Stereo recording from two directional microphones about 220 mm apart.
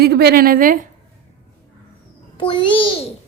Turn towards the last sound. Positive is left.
turn(degrees=25)  # may be behind; listen again after turning